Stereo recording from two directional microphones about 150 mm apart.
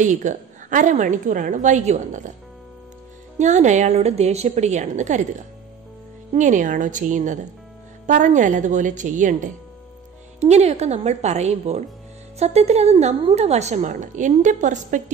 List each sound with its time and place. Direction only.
0.0 s a woman's voice: 55° right (ahead or behind)
3.3 s a woman's voice: 50° right (ahead or behind)
6.3 s a woman's voice: 55° right (ahead or behind)
10.4 s a woman's voice: 45° right (ahead or behind)